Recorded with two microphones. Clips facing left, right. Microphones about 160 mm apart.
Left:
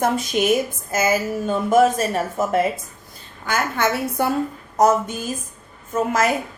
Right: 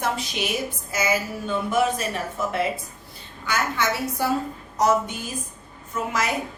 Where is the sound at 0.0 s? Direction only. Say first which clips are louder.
Left 7 dB; 50° left (ahead or behind).